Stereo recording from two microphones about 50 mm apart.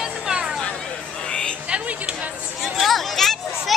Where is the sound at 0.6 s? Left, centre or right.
Centre.